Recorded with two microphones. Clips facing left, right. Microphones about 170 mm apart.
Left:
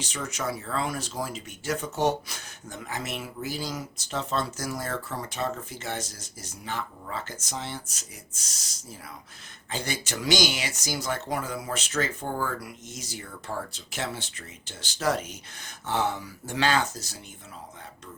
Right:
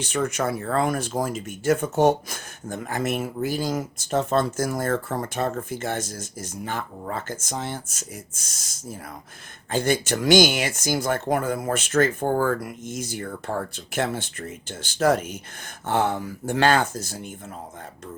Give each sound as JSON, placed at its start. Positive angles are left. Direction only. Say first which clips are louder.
{"t": 0.0, "sound": "speech", "louder": "right 8 dB", "side_deg": -55}